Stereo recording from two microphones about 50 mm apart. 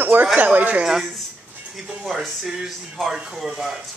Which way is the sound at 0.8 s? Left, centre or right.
Centre.